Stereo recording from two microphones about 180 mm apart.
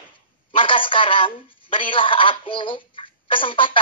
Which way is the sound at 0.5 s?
30° left (ahead or behind).